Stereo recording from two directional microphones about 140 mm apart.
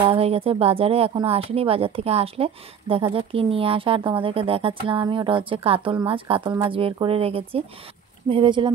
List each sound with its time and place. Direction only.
0.0 s speech: 45° right (ahead or behind)